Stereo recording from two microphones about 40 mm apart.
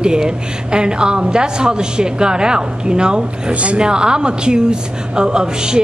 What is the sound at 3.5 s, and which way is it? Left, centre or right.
Speech, right.